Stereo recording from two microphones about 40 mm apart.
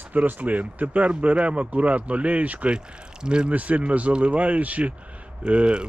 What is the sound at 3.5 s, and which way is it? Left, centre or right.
Speech, right.